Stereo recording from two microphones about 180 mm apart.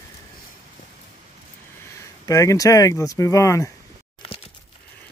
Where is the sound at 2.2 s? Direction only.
20° left (ahead or behind).